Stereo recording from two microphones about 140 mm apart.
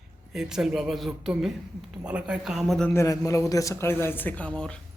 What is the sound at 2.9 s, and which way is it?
A man's voice, 20° left (ahead or behind).